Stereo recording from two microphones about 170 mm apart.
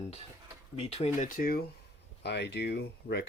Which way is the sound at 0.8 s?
35° left (ahead or behind).